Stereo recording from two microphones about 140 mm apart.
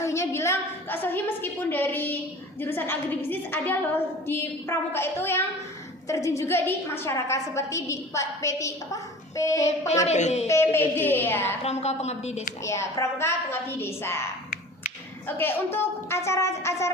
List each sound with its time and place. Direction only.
0.0 s a woman's voice: 20° left (ahead or behind)
9.6 s a woman's voice: 50° left (ahead or behind)
10.5 s a woman's voice: 15° left (ahead or behind)
11.6 s a woman's voice: 50° left (ahead or behind)
12.6 s a woman's voice: 20° left (ahead or behind)
15.3 s a woman's voice: 15° left (ahead or behind)